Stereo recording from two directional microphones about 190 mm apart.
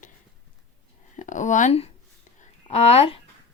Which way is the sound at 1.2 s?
40° left (ahead or behind).